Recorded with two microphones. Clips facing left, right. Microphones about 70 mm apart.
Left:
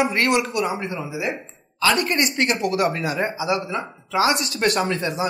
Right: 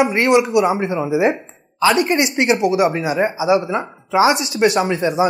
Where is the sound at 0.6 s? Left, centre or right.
Right.